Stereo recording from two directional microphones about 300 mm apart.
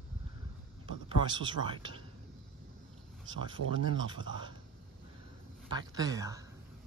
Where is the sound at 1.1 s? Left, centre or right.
Centre.